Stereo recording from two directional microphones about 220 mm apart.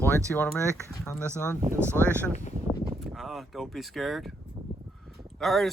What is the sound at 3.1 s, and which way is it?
Speech, centre (ahead or behind).